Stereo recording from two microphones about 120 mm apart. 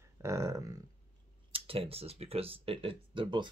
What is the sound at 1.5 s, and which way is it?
Speech, 50° right (ahead or behind).